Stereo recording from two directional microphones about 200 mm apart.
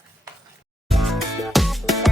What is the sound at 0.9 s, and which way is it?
Music, centre (ahead or behind).